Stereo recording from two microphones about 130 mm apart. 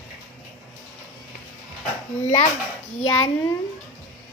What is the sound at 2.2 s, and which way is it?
Speech, 60° left (ahead or behind).